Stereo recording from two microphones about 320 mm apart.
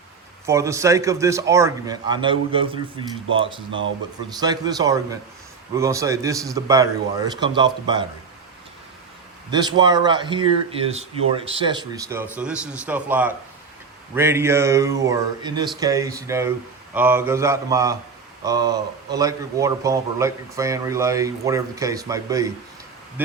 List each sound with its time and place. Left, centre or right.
0.4 s a man's voice: centre
9.5 s a man's voice: centre